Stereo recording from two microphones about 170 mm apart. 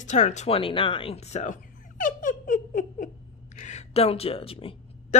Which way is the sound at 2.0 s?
50° left (ahead or behind).